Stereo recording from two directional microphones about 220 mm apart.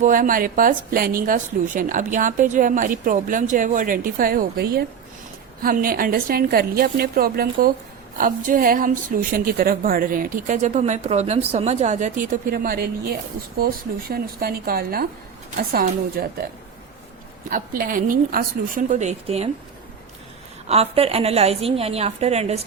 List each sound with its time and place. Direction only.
0.0 s a woman's voice: 40° right (ahead or behind)
17.5 s a woman's voice: 40° right (ahead or behind)
20.7 s a woman's voice: 25° right (ahead or behind)